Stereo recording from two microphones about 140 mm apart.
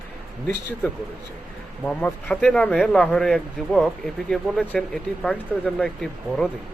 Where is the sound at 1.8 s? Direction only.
10° left (ahead or behind).